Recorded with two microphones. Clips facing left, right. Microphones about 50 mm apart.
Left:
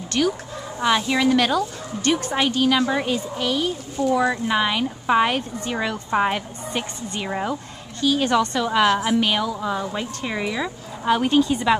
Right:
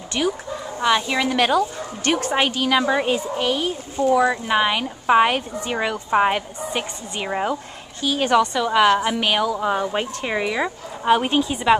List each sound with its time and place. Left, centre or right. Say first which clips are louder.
0.2 s speech: left 1 dB; centre
1.3 s speech: right 3 dB; right
1.6 s speech: right 2 dB; right
2.4 s speech: left 3 dB; right
2.8 s speech: right 2 dB; centre
4.1 s speech: right 2 dB; centre
8.5 s speech: right 2 dB; centre
9.2 s speech: right 1 dB; right
9.6 s speech: right 4 dB; right
9.9 s speech: right 3 dB; right